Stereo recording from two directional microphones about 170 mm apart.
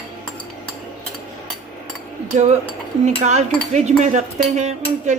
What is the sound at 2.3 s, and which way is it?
Cutlery, 40° right (ahead or behind).